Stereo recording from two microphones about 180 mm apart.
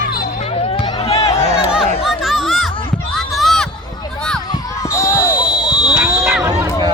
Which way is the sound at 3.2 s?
Centre (ahead or behind).